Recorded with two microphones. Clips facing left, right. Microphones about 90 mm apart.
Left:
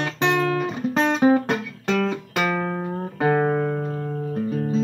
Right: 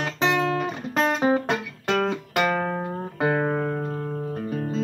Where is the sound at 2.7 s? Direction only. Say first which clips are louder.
Left 1 dB; 10° right (ahead or behind).